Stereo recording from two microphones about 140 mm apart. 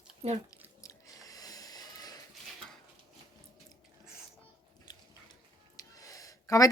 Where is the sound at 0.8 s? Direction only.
25° left (ahead or behind).